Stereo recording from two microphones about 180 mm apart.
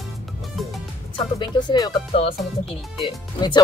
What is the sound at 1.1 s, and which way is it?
Speech, 25° left (ahead or behind).